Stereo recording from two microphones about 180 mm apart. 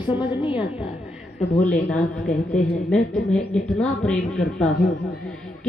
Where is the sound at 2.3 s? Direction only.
40° left (ahead or behind).